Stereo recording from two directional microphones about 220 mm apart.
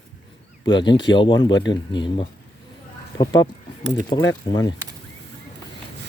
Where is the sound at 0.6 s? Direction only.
20° left (ahead or behind).